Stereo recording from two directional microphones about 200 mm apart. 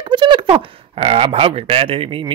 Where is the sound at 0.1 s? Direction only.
25° right (ahead or behind).